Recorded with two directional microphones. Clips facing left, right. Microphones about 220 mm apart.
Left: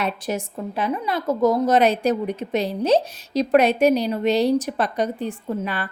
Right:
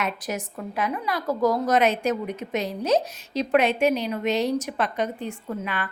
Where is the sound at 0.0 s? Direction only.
30° left (ahead or behind).